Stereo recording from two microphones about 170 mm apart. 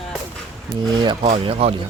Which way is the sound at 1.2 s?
40° right (ahead or behind).